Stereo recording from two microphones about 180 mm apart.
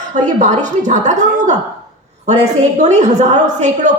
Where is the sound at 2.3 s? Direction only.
40° right (ahead or behind).